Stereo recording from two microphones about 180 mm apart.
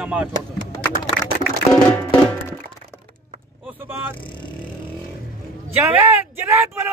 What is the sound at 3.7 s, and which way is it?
Vehicle, 10° right (ahead or behind).